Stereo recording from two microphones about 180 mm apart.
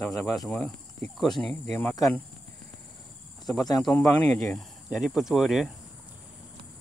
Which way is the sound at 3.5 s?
20° left (ahead or behind).